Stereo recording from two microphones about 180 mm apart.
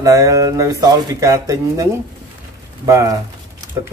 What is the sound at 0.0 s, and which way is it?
Speech, 20° right (ahead or behind).